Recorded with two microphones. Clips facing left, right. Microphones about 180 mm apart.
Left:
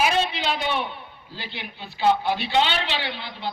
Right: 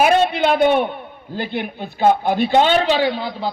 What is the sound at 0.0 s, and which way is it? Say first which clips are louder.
A man's voice: right 8 dB; 55° right (ahead or behind).